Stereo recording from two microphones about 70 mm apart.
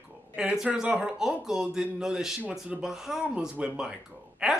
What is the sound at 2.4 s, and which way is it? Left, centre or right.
Speech, centre.